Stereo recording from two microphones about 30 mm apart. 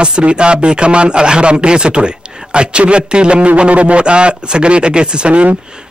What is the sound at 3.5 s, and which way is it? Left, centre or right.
A man's voice, right.